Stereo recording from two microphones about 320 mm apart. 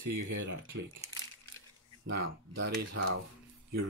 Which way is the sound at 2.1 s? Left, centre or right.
Right.